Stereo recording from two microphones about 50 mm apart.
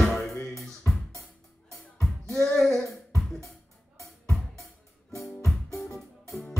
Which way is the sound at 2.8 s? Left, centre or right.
Right.